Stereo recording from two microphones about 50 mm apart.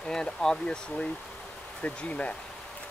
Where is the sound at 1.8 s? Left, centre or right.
Left.